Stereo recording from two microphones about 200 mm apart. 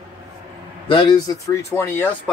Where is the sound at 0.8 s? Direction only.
25° left (ahead or behind).